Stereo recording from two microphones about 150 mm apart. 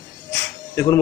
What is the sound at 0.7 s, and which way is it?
Speech, 20° left (ahead or behind).